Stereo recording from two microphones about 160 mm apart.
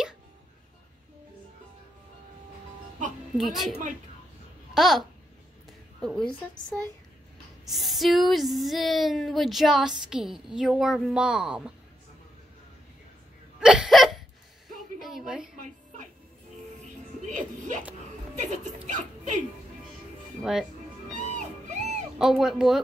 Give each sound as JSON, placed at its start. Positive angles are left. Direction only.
{"t": 3.3, "sound": "speech", "side_deg": 0}
{"t": 4.7, "sound": "speech", "side_deg": 0}
{"t": 13.6, "sound": "hiccup", "side_deg": -5}
{"t": 15.0, "sound": "a sound", "side_deg": 0}
{"t": 15.5, "sound": "a sound", "side_deg": -50}
{"t": 17.2, "sound": "music", "side_deg": -50}
{"t": 18.4, "sound": "speech", "side_deg": -50}
{"t": 18.9, "sound": "music", "side_deg": -50}
{"t": 21.1, "sound": "music", "side_deg": -50}
{"t": 22.2, "sound": "speech", "side_deg": 0}